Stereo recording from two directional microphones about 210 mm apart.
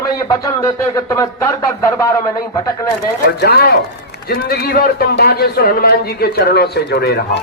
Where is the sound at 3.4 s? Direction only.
50° left (ahead or behind).